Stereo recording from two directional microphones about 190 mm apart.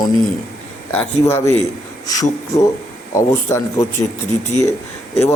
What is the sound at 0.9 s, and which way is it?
A man's voice, 10° left (ahead or behind).